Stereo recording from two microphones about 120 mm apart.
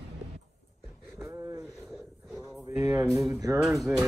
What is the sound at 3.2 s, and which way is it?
Speech, 25° right (ahead or behind).